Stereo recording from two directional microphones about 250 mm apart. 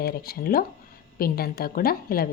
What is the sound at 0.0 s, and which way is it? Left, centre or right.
A woman's voice, left.